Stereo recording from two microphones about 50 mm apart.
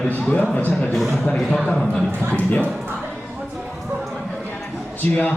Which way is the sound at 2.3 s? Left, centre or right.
Left.